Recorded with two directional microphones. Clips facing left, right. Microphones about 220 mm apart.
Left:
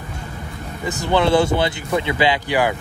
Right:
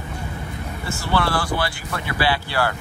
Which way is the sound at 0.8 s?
20° left (ahead or behind).